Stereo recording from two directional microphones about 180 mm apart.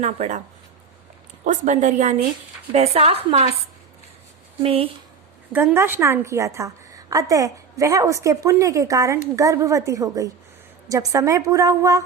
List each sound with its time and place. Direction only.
0.0 s a woman's voice: 40° right (ahead or behind)
1.5 s a woman's voice: 45° right (ahead or behind)
4.6 s a woman's voice: 35° right (ahead or behind)
5.5 s a woman's voice: 10° right (ahead or behind)